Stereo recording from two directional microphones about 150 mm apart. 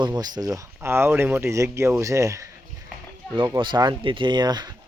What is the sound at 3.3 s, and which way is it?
Speech, 30° right (ahead or behind).